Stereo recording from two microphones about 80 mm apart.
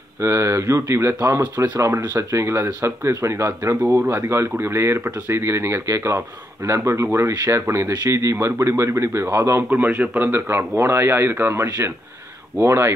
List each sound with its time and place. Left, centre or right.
0.2 s speech: right
9.7 s speech: centre